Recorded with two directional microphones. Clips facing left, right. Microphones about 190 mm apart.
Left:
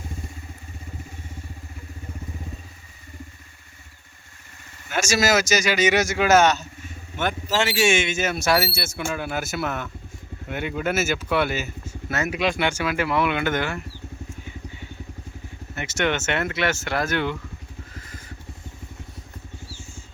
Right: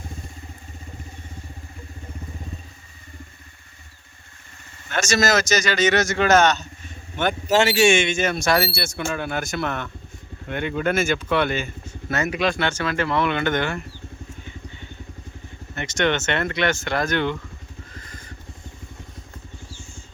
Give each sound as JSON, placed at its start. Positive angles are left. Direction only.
{"t": 4.9, "sound": "speech", "side_deg": 10}
{"t": 7.4, "sound": "speech", "side_deg": -45}
{"t": 7.8, "sound": "speech", "side_deg": 5}
{"t": 14.4, "sound": "vehicle", "side_deg": 10}
{"t": 15.7, "sound": "speech", "side_deg": 5}